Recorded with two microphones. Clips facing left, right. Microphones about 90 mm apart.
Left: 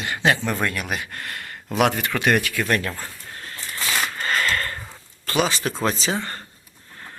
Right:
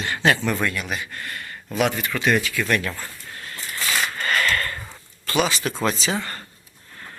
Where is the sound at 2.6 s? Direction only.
40° left (ahead or behind).